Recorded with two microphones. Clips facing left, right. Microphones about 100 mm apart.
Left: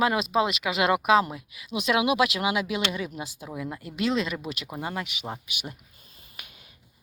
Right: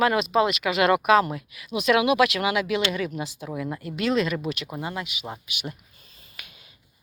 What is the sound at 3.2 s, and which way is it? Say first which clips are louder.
Speech: right 4 dB; 5° left (ahead or behind).